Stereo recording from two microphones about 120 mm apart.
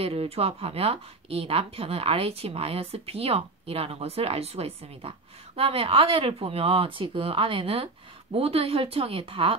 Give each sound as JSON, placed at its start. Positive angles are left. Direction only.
{"t": 0.0, "sound": "speech", "side_deg": -55}